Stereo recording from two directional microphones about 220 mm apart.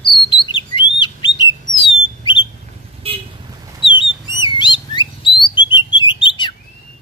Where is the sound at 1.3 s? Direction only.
20° left (ahead or behind).